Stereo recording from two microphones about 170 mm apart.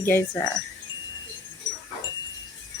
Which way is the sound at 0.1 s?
15° left (ahead or behind).